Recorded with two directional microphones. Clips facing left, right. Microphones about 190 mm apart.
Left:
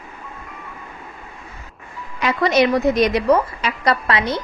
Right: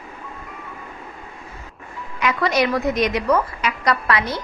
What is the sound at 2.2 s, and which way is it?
A woman's voice, 25° left (ahead or behind).